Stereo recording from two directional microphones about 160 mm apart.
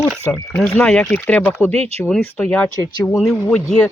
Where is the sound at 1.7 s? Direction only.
40° right (ahead or behind).